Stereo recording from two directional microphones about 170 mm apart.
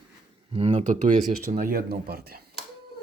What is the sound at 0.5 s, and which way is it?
Speech, 35° right (ahead or behind).